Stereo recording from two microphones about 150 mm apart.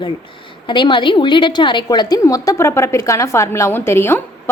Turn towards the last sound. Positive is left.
turn(degrees=15)  # may be behind; listen again after turning